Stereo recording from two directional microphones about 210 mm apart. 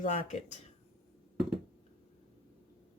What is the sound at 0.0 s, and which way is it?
Speech, 30° left (ahead or behind).